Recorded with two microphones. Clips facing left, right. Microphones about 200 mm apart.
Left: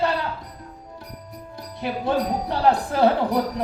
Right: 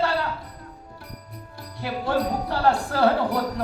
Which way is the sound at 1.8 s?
20° left (ahead or behind).